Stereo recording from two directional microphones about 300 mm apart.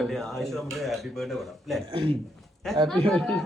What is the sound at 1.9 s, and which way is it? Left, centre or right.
Speech, centre.